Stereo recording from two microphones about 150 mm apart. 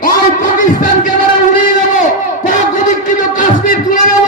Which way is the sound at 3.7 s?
60° left (ahead or behind).